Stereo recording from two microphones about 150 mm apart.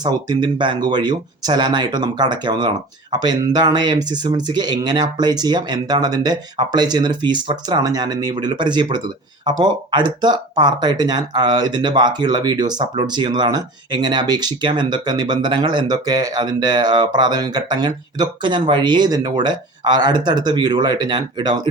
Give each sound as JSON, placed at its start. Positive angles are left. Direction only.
{"t": 0.0, "sound": "speech", "side_deg": -25}